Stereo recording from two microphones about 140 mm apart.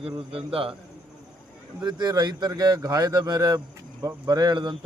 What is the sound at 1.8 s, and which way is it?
Speech, 30° right (ahead or behind).